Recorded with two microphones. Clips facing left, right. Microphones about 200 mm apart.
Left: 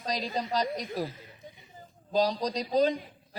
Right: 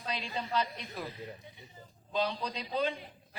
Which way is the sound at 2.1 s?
35° left (ahead or behind).